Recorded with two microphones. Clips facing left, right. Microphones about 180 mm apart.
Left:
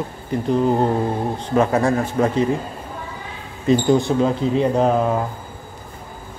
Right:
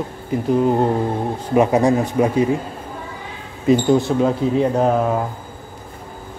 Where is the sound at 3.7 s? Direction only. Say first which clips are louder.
Right 1 dB; 5° right (ahead or behind).